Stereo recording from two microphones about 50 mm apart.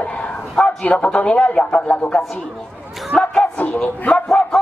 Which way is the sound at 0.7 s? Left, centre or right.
Left.